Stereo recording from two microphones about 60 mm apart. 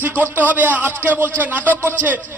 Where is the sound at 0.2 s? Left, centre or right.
Right.